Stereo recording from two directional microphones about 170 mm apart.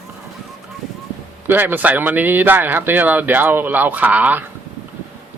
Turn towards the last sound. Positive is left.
turn(degrees=-10)  # may be behind; listen again after turning